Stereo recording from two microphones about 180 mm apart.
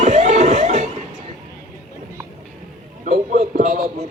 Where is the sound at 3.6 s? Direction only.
50° right (ahead or behind).